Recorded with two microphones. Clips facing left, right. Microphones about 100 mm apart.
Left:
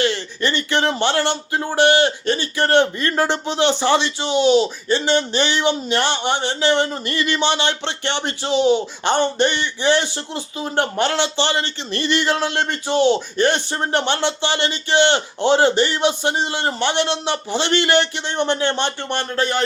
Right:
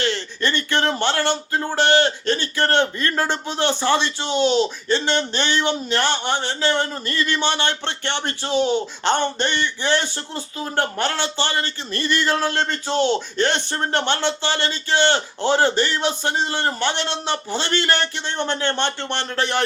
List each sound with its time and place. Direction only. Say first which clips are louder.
0.4 s speech: left 2 dB; 15° left (ahead or behind)